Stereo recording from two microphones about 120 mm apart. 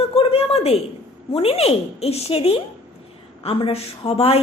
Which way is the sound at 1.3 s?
55° left (ahead or behind).